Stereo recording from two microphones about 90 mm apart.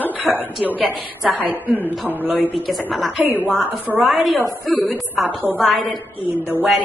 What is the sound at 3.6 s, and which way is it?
Speech, 20° right (ahead or behind).